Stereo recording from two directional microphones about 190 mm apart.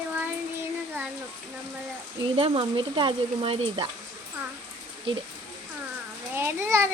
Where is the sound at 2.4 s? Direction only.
30° right (ahead or behind).